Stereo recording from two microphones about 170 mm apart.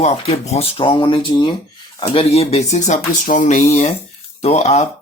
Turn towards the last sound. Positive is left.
turn(degrees=40)  # may be behind; listen again after turning